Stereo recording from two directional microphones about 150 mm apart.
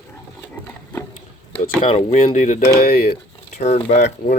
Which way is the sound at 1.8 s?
40° left (ahead or behind).